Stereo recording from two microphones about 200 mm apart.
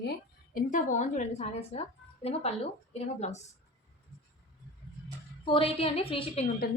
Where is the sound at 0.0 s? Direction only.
50° left (ahead or behind); by 3.4 s 35° left (ahead or behind).